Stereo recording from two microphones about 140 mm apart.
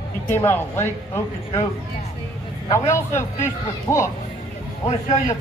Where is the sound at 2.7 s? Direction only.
20° left (ahead or behind).